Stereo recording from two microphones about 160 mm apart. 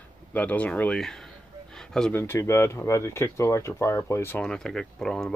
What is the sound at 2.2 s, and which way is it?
Speech, 15° left (ahead or behind).